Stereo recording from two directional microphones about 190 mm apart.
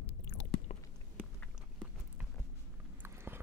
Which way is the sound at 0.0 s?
70° left (ahead or behind).